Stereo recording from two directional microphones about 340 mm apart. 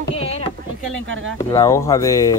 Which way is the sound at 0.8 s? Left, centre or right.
Right.